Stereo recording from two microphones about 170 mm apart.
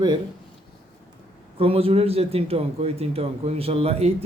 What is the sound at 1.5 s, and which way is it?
A man's voice, 35° right (ahead or behind).